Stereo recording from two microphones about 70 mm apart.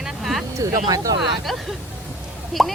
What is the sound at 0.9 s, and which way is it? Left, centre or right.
Speech, right.